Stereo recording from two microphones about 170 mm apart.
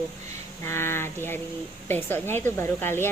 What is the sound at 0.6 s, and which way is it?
Speech, 15° left (ahead or behind).